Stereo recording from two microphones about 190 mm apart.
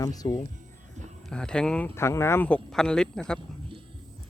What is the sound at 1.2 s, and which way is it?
Speech, 5° left (ahead or behind).